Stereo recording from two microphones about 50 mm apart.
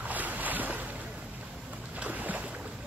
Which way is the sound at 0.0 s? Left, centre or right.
Right.